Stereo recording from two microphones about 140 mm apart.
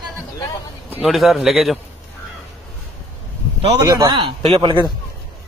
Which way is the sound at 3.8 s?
25° right (ahead or behind).